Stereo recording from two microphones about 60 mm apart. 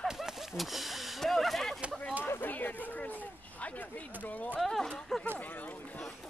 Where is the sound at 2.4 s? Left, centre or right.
Left.